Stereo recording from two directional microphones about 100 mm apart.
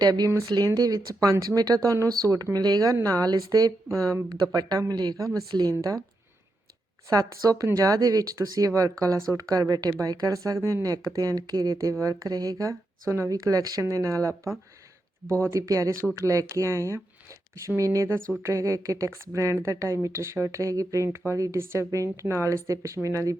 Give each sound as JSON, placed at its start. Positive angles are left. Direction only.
{"t": 0.0, "sound": "speech", "side_deg": -40}
{"t": 7.1, "sound": "speech", "side_deg": -35}